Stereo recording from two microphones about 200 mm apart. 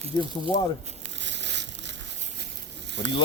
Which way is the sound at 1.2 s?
60° right (ahead or behind).